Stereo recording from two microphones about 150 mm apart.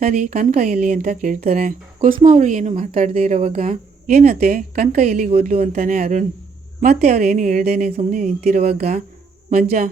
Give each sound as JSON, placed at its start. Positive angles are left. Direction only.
{"t": 0.0, "sound": "a woman's voice", "side_deg": -55}
{"t": 9.6, "sound": "speech", "side_deg": -65}